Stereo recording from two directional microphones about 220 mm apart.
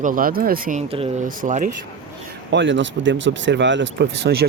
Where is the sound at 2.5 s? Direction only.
55° right (ahead or behind).